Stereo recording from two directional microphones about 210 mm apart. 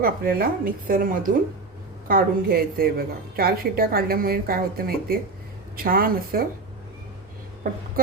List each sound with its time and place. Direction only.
0.0 s a woman's voice: 45° right (ahead or behind)